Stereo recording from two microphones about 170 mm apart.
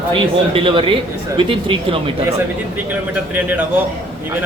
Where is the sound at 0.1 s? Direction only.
30° right (ahead or behind).